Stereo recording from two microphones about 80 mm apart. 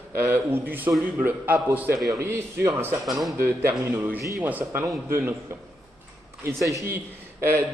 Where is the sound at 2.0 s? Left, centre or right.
Right.